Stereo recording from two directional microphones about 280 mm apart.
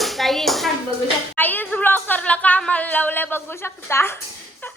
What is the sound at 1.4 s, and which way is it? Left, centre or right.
Speech, centre.